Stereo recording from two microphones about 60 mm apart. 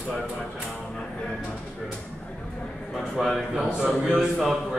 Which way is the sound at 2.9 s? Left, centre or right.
Centre.